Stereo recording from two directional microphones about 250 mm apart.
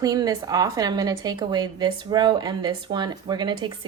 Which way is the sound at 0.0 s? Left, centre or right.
Centre.